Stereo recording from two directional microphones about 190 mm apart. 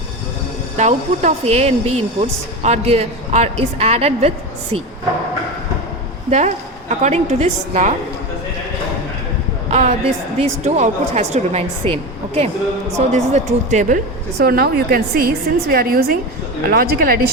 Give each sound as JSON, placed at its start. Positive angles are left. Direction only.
{"t": 0.8, "sound": "speech", "side_deg": -35}
{"t": 6.3, "sound": "speech", "side_deg": -40}
{"t": 9.6, "sound": "speech", "side_deg": -35}
{"t": 14.3, "sound": "a woman's voice", "side_deg": -55}